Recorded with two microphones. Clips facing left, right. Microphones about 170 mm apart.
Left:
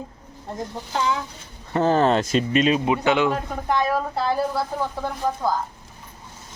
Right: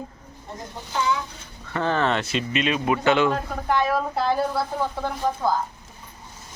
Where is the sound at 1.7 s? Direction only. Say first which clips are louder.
Left 5 dB; 40° left (ahead or behind).